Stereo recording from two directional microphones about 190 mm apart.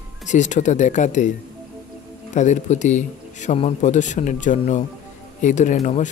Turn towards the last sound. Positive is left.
turn(degrees=40)  # may be behind; listen again after turning